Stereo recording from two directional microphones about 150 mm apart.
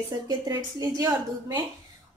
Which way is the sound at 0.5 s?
25° right (ahead or behind).